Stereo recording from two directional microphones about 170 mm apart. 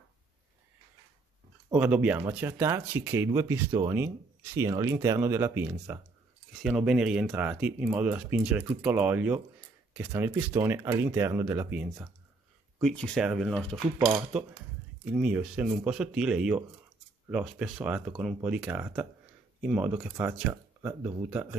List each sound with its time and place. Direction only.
1.7 s speech: 10° right (ahead or behind)
6.6 s speech: 5° right (ahead or behind)
12.8 s speech: 5° left (ahead or behind)
13.9 s speech: 10° right (ahead or behind)